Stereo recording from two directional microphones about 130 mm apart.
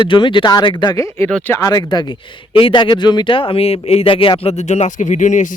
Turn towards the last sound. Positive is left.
turn(degrees=70)  # may be behind; listen again after turning